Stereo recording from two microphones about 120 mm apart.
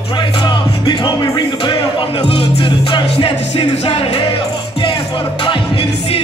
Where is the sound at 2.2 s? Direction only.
45° left (ahead or behind).